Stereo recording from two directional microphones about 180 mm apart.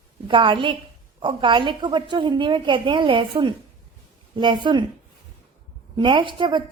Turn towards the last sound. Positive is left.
turn(degrees=-25)  # may be behind; listen again after turning